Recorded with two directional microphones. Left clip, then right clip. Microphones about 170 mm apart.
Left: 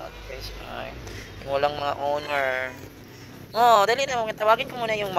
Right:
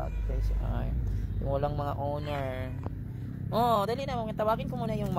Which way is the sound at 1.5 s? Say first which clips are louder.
Left 8 dB; 15° right (ahead or behind).